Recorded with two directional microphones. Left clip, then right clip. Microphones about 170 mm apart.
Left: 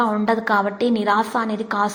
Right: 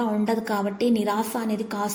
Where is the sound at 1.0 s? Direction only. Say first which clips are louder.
Left 7 dB; 10° right (ahead or behind).